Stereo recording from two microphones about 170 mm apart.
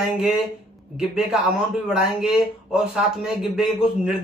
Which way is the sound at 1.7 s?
5° right (ahead or behind).